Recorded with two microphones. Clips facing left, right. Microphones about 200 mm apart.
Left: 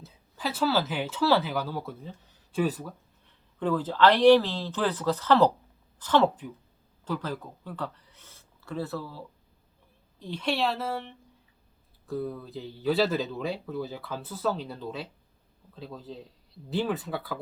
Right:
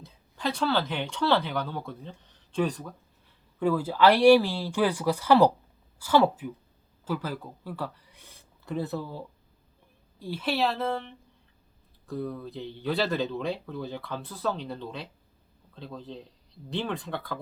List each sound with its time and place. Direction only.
0.0 s speech: 5° left (ahead or behind)
3.6 s speech: 10° right (ahead or behind)
10.2 s speech: 5° right (ahead or behind)